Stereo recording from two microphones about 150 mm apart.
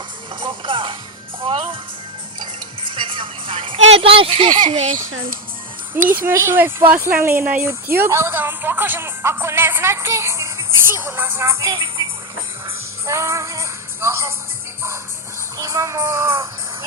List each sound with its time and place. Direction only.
0.3 s music: 35° right (ahead or behind)
2.9 s a sound: 35° right (ahead or behind)
6.1 s speech: 15° right (ahead or behind); by 12.0 s 30° right (ahead or behind)
13.1 s music: 20° right (ahead or behind)
15.5 s music: 20° right (ahead or behind)